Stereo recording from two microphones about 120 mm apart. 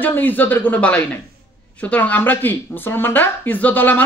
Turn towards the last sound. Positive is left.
turn(degrees=15)  # may be behind; listen again after turning